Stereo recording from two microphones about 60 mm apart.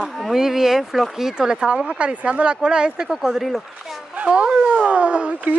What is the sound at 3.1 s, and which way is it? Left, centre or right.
Speech, centre.